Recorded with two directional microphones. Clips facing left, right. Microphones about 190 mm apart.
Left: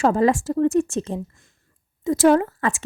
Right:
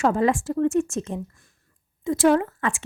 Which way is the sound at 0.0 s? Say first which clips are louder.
Left 3 dB; 35° left (ahead or behind).